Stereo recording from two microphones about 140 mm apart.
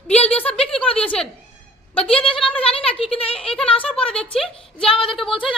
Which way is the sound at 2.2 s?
40° left (ahead or behind).